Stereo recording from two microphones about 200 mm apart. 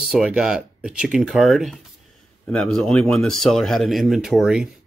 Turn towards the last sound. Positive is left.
turn(degrees=-5)  # may be behind; listen again after turning